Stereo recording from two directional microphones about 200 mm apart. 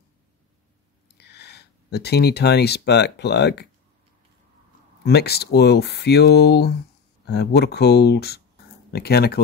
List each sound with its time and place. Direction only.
1.1 s speech: 55° left (ahead or behind)
5.0 s speech: 55° left (ahead or behind)